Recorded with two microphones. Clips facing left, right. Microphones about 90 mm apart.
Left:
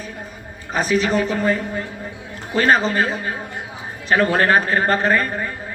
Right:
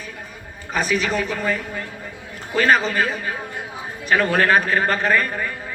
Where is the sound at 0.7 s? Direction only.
35° left (ahead or behind).